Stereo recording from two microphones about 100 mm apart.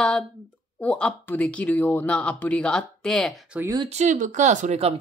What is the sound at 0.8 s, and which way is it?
Speech, 15° left (ahead or behind).